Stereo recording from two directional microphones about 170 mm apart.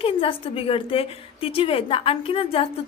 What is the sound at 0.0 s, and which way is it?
A woman's voice, 30° left (ahead or behind).